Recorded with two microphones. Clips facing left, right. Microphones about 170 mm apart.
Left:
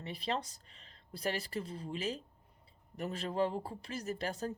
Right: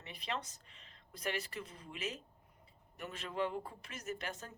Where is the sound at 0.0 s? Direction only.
35° left (ahead or behind).